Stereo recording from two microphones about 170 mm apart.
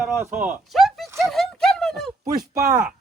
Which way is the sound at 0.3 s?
10° right (ahead or behind).